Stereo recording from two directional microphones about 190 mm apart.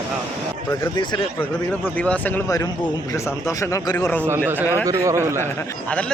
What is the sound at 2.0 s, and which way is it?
Speech, 5° left (ahead or behind).